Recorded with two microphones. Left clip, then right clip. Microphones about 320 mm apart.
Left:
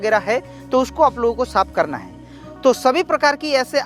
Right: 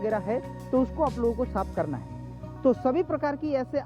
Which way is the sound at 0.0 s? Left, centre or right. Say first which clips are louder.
Left 10 dB; centre.